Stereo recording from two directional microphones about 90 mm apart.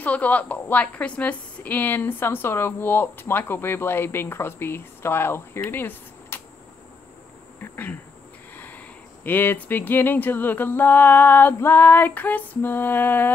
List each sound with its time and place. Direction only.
0.0 s a woman's voice: 15° left (ahead or behind)
7.6 s insect: 25° left (ahead or behind)
8.5 s a woman's voice: 20° left (ahead or behind)